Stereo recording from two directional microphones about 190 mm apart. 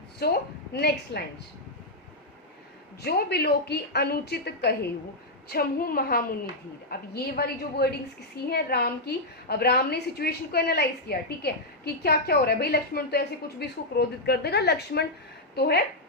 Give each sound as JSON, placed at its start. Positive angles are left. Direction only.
{"t": 0.7, "sound": "a woman's voice", "side_deg": 60}
{"t": 3.0, "sound": "a woman's voice", "side_deg": 55}